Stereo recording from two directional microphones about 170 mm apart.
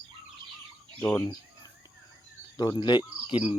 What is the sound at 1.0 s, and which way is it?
Speech, 15° left (ahead or behind).